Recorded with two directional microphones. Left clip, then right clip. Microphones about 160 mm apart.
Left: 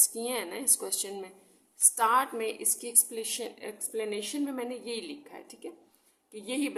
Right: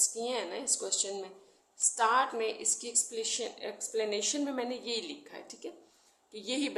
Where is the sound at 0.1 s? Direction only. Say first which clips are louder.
Left 1 dB; 35° left (ahead or behind).